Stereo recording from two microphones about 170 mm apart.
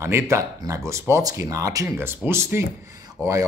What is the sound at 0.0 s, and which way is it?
A man's voice, 15° right (ahead or behind).